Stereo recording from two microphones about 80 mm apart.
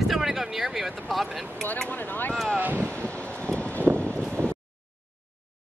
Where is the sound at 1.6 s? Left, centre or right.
Left.